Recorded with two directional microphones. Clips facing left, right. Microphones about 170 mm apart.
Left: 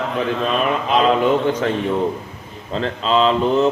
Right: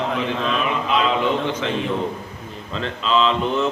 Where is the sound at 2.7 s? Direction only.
40° left (ahead or behind).